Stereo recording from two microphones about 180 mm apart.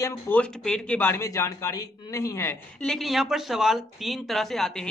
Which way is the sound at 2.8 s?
Centre (ahead or behind).